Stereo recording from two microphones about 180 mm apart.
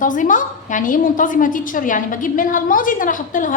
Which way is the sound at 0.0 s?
45° left (ahead or behind).